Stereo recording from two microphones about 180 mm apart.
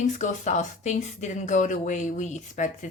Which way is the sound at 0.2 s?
40° left (ahead or behind).